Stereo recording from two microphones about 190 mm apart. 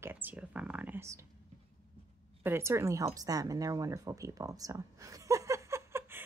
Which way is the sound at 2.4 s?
15° right (ahead or behind).